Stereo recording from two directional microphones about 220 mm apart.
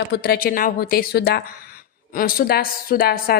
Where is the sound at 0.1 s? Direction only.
45° left (ahead or behind).